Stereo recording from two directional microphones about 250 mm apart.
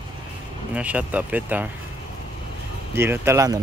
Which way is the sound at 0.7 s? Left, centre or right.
Centre.